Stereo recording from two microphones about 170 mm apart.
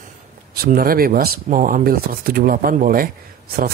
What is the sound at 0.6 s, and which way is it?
Speech, 60° right (ahead or behind).